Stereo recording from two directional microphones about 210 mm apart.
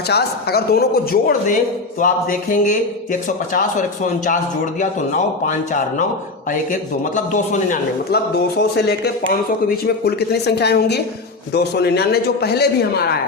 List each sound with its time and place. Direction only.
0.1 s a man's voice: 50° left (ahead or behind)